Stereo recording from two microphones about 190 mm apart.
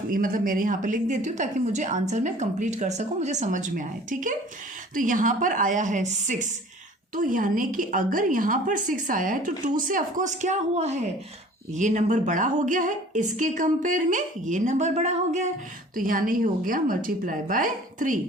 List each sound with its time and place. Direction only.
0.1 s a woman's voice: 45° right (ahead or behind)